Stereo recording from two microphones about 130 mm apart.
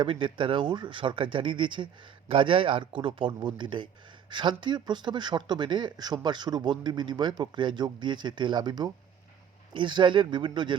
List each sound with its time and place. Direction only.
0.0 s speech: 40° right (ahead or behind)